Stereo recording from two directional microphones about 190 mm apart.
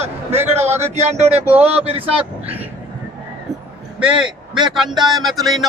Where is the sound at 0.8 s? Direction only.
35° right (ahead or behind).